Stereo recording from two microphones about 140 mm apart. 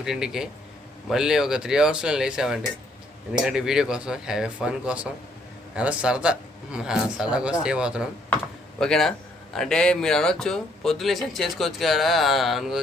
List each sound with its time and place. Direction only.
0.0 s a man's voice: 5° right (ahead or behind)
8.8 s a man's voice: 5° left (ahead or behind)